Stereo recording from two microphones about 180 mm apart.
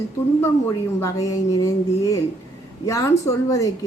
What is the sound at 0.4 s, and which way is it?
A woman's voice, 15° left (ahead or behind).